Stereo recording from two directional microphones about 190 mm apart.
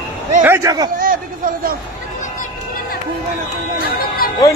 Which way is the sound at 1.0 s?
50° right (ahead or behind).